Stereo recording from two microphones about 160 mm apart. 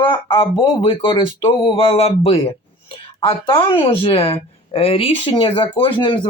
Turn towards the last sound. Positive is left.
turn(degrees=30)  # may be behind; listen again after turning